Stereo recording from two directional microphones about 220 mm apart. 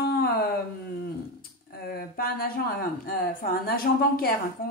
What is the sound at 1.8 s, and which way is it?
Speech, 40° left (ahead or behind).